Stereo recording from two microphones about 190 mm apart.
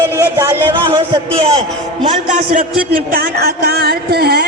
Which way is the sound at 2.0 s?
40° right (ahead or behind).